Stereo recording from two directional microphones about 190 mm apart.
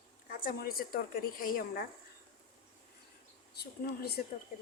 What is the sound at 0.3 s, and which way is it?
A woman's voice, 45° left (ahead or behind).